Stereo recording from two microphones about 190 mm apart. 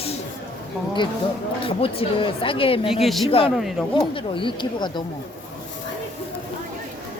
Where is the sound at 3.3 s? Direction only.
30° left (ahead or behind).